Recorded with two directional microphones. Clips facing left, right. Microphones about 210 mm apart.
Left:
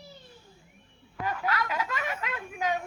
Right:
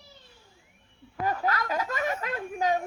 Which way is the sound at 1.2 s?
40° right (ahead or behind).